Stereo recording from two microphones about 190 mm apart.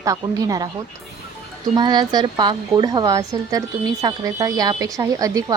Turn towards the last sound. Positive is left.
turn(degrees=-20)  # may be behind; listen again after turning